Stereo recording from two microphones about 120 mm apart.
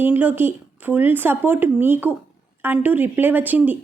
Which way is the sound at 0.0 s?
15° right (ahead or behind).